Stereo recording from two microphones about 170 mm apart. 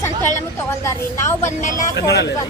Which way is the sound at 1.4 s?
45° left (ahead or behind).